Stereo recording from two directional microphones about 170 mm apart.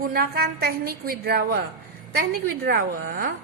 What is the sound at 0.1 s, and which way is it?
A woman's voice, 60° right (ahead or behind).